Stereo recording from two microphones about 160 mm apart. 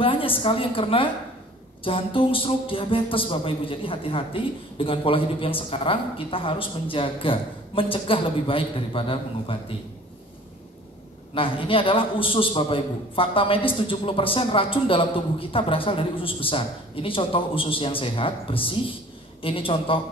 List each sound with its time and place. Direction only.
0.0 s a woman's voice: 35° left (ahead or behind)
11.3 s a man's voice: 35° left (ahead or behind)